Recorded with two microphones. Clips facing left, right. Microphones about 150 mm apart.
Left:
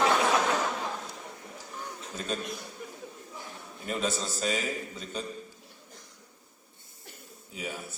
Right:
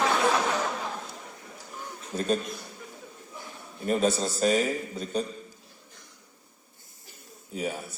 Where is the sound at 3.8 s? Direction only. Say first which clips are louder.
Right 7 dB; 45° right (ahead or behind).